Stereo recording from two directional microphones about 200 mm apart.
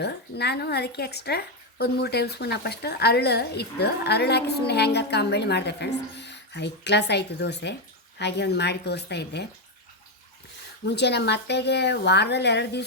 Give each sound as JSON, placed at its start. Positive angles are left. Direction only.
{"t": 0.0, "sound": "speech", "side_deg": 55}
{"t": 10.8, "sound": "speech", "side_deg": 55}